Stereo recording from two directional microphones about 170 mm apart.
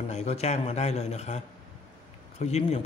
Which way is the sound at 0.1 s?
40° left (ahead or behind).